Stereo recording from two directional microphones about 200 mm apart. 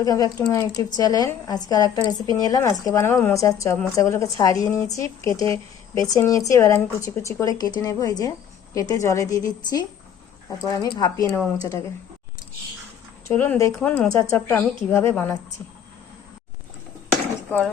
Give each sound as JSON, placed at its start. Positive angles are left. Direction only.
{"t": 0.0, "sound": "speech", "side_deg": 20}
{"t": 13.2, "sound": "speech", "side_deg": 10}
{"t": 17.5, "sound": "speech", "side_deg": 10}